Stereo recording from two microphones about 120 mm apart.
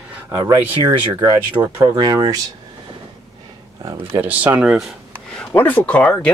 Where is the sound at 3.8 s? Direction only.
30° right (ahead or behind).